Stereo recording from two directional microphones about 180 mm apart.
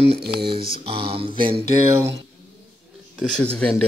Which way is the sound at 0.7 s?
30° right (ahead or behind).